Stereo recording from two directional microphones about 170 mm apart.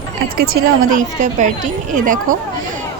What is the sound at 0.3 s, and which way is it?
Speech, 55° right (ahead or behind).